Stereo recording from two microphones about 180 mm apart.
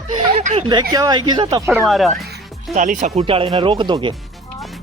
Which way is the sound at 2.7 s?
45° right (ahead or behind).